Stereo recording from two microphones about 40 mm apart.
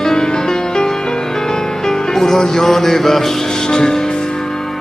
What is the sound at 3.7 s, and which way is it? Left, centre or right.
Speech, centre.